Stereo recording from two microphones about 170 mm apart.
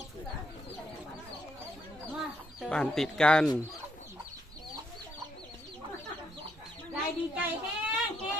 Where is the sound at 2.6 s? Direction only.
5° left (ahead or behind).